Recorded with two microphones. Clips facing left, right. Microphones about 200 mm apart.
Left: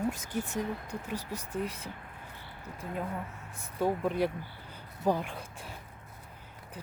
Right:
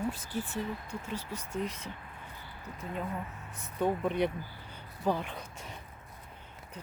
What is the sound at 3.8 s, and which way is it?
Speech, 5° left (ahead or behind).